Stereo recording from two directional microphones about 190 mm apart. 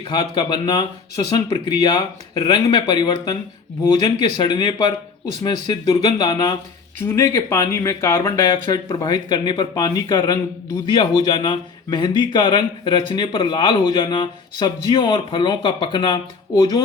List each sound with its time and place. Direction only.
0.1 s speech: 20° left (ahead or behind)
4.4 s speech: 25° left (ahead or behind)